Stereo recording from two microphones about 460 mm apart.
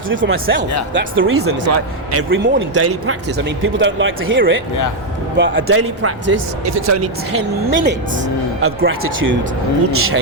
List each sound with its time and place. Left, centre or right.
0.1 s speech: right